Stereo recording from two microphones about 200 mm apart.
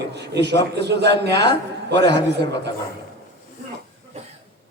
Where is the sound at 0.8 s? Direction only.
60° right (ahead or behind).